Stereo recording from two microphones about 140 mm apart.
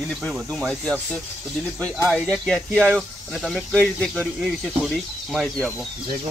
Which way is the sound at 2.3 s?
Centre (ahead or behind).